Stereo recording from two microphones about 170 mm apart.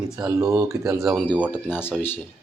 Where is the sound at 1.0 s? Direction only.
Centre (ahead or behind).